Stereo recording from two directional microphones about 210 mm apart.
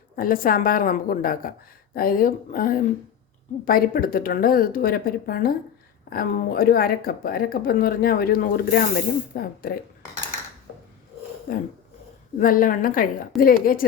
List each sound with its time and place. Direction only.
0.2 s a woman's voice: 40° left (ahead or behind)
11.5 s a woman's voice: 45° left (ahead or behind)